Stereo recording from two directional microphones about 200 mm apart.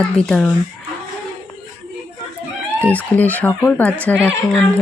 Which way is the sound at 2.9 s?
10° left (ahead or behind).